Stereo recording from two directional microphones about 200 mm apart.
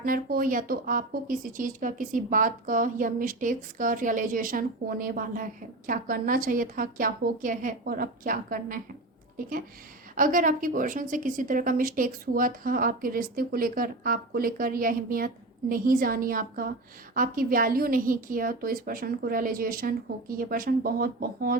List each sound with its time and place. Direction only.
0.0 s speech: 45° right (ahead or behind)
10.2 s speech: 40° right (ahead or behind)